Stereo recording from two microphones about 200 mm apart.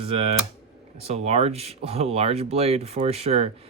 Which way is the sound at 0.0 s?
30° right (ahead or behind).